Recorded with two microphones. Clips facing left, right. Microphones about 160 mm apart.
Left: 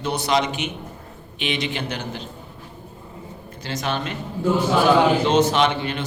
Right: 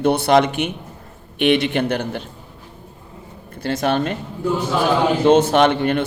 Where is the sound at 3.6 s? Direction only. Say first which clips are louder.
Right 7 dB; 55° right (ahead or behind).